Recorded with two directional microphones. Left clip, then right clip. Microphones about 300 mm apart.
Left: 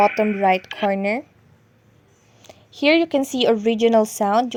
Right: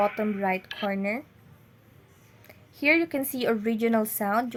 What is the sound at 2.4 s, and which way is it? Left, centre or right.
A woman's voice, centre.